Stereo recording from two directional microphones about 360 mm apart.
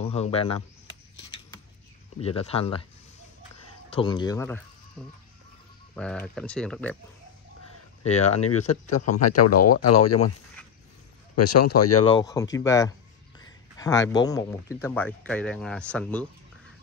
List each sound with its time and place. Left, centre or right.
0.0 s speech: centre
2.1 s speech: centre
3.9 s speech: centre
8.0 s speech: centre
8.4 s speech: left
11.3 s a man's voice: left
12.0 s speech: centre